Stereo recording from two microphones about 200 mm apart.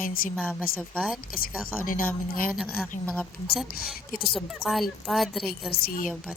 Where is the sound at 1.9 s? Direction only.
45° left (ahead or behind).